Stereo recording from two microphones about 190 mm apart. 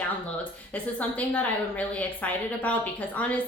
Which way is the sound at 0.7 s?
10° left (ahead or behind).